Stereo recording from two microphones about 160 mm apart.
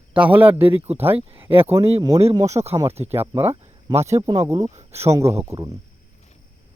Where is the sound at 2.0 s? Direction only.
25° right (ahead or behind).